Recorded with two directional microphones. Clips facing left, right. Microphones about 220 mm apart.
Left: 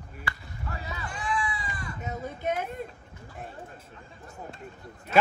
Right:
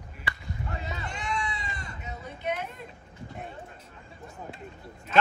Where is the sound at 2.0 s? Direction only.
45° left (ahead or behind).